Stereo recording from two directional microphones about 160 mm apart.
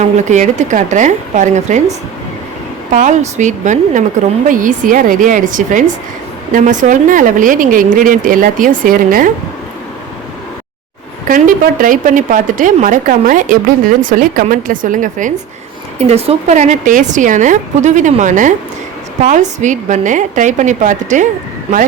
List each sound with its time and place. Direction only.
0.0 s a woman's voice: 50° right (ahead or behind)
2.9 s a woman's voice: 50° right (ahead or behind)
11.3 s a woman's voice: 60° right (ahead or behind)
16.0 s a woman's voice: 40° right (ahead or behind)